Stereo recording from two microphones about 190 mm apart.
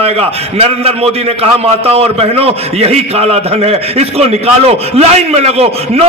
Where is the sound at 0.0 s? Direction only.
30° right (ahead or behind).